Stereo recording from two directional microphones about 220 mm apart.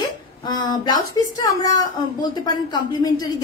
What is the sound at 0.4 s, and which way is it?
A woman's voice, 20° left (ahead or behind).